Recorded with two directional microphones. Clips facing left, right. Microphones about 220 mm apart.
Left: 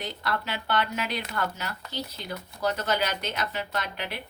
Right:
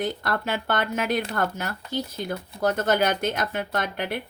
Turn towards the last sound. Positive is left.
turn(degrees=-50)  # may be behind; listen again after turning